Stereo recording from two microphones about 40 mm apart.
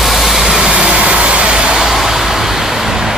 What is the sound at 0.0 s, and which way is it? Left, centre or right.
Vehicle, centre.